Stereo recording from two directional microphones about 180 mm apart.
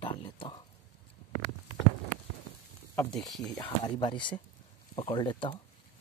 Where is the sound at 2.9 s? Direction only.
10° left (ahead or behind).